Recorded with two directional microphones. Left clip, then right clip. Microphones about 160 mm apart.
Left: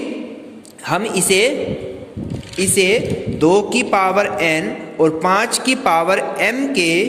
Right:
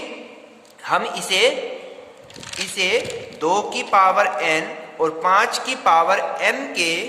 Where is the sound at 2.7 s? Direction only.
25° left (ahead or behind).